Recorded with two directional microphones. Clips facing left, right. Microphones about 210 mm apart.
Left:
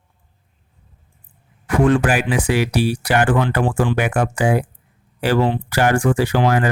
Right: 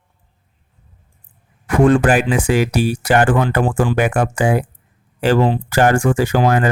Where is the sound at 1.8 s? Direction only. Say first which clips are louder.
Right 4 dB; 45° right (ahead or behind).